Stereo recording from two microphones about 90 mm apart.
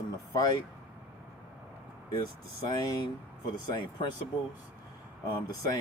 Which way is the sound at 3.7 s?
55° left (ahead or behind).